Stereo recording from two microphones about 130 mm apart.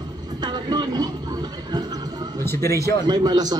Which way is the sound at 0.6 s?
30° right (ahead or behind).